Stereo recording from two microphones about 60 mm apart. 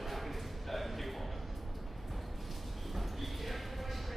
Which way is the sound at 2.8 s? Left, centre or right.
Centre.